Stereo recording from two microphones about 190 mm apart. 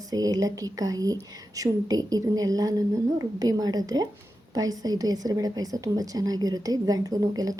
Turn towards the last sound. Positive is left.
turn(degrees=-20)  # may be behind; listen again after turning